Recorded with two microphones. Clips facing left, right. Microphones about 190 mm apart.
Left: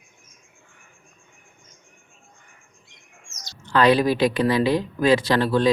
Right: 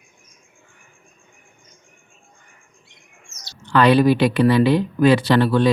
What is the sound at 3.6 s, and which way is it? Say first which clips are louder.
Speech: right 3 dB; 65° right (ahead or behind).